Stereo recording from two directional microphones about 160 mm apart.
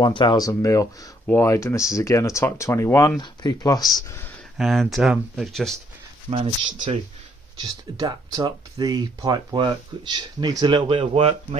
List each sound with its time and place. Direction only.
0.0 s speech: 30° left (ahead or behind)
4.6 s speech: centre (ahead or behind)
6.3 s speech: 30° right (ahead or behind)
8.0 s speech: 25° right (ahead or behind)